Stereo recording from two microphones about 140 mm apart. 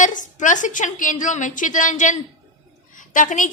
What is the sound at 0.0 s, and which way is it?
A woman's voice, 65° left (ahead or behind).